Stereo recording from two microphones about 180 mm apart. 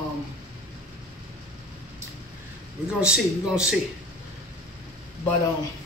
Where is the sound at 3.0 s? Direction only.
5° right (ahead or behind).